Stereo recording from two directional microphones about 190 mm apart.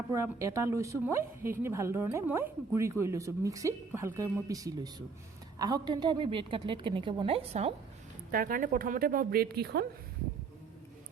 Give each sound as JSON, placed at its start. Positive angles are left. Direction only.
{"t": 0.1, "sound": "a woman's voice", "side_deg": -15}
{"t": 8.3, "sound": "a woman's voice", "side_deg": -45}